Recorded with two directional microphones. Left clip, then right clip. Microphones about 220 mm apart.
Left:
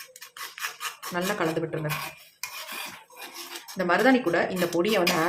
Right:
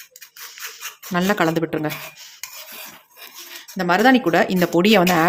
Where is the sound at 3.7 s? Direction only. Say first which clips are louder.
Right 6 dB; 40° right (ahead or behind).